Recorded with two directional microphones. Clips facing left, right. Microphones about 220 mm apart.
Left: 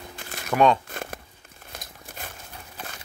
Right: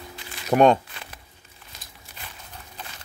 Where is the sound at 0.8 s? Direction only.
50° left (ahead or behind).